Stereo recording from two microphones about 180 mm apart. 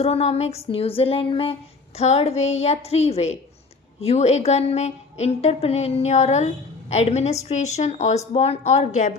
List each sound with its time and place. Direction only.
0.0 s a woman's voice: 35° left (ahead or behind)